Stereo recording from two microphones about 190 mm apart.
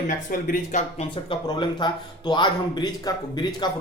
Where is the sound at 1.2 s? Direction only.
25° left (ahead or behind).